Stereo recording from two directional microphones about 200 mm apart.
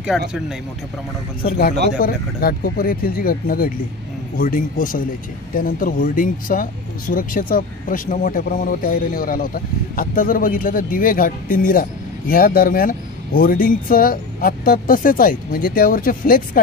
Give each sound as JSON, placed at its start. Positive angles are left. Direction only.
{"t": 0.1, "sound": "speech", "side_deg": 0}
{"t": 2.0, "sound": "speech", "side_deg": 45}